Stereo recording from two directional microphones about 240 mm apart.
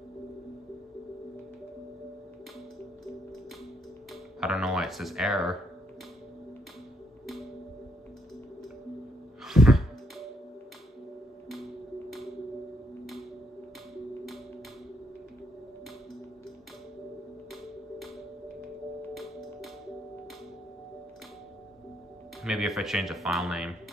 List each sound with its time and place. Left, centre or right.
4.1 s speech: centre
9.5 s music: centre
11.4 s music: centre
17.5 s music: centre
19.1 s music: centre
22.4 s speech: centre